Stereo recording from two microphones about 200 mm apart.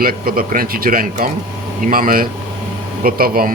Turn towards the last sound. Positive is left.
turn(degrees=-45)  # may be behind; listen again after turning